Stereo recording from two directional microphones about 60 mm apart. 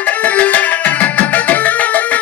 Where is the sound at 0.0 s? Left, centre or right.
Left.